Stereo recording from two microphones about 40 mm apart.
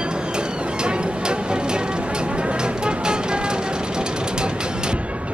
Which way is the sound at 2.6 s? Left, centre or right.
Right.